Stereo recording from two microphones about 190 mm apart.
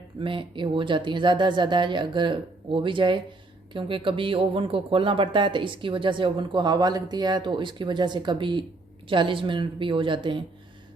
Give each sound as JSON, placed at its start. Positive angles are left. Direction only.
{"t": 0.2, "sound": "speech", "side_deg": -25}